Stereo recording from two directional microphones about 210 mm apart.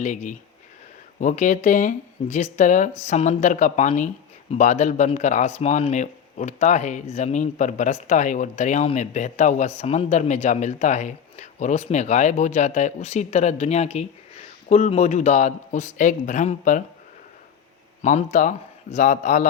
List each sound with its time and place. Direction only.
0.0 s speech: 35° left (ahead or behind)
18.0 s speech: 35° left (ahead or behind)